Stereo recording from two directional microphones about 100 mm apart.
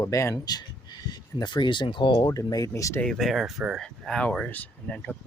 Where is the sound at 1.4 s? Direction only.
50° left (ahead or behind).